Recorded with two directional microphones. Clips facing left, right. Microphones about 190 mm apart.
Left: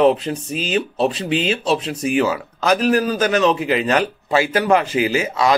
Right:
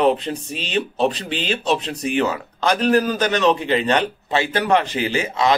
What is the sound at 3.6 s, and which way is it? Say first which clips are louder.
A man's voice: left 1 dB; 30° right (ahead or behind).